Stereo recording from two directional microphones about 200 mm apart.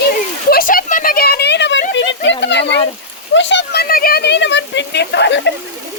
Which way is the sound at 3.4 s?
65° left (ahead or behind).